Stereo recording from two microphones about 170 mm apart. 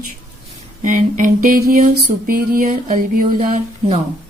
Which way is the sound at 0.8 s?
50° right (ahead or behind).